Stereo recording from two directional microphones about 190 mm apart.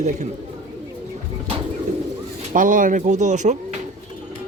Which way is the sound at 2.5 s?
45° right (ahead or behind).